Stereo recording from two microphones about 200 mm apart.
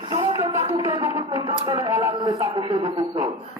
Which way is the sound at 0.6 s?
20° right (ahead or behind).